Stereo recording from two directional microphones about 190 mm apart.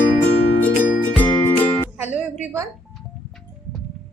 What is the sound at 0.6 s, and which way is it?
Music, 10° left (ahead or behind).